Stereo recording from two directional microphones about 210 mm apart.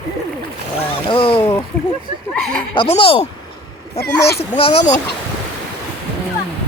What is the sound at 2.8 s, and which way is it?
Speech, 25° left (ahead or behind).